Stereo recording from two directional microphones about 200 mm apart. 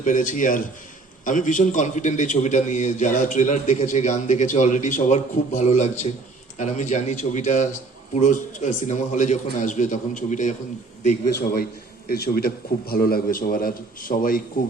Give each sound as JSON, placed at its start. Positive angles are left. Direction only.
{"t": 0.0, "sound": "a man's voice", "side_deg": 40}
{"t": 12.0, "sound": "a man's voice", "side_deg": 50}